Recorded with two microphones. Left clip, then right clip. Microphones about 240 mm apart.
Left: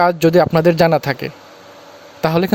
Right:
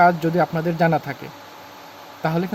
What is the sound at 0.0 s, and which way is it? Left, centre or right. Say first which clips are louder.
Speech: left 4 dB; left.